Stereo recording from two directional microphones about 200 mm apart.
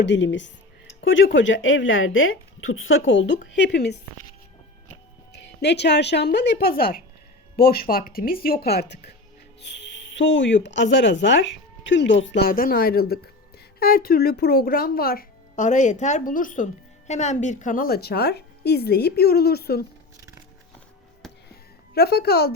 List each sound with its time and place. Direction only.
0.0 s speech: 65° left (ahead or behind)
5.3 s speech: 55° left (ahead or behind)
12.5 s speech: 45° left (ahead or behind)
21.5 s a sound: 50° left (ahead or behind)